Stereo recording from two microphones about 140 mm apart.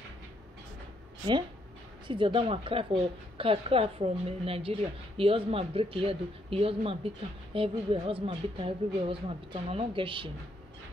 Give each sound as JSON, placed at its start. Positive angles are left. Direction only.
{"t": 2.0, "sound": "a woman's voice", "side_deg": -35}